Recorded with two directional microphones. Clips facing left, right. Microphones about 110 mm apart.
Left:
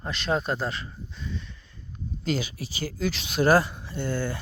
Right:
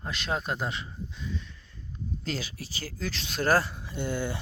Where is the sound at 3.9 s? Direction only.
15° right (ahead or behind).